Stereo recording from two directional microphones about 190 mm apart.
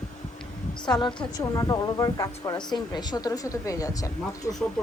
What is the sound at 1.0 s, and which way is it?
A woman's voice, 25° left (ahead or behind).